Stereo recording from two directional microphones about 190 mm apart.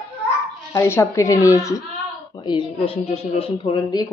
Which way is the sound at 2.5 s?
25° left (ahead or behind).